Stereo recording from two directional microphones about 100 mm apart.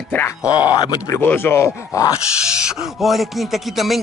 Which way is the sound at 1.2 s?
20° left (ahead or behind).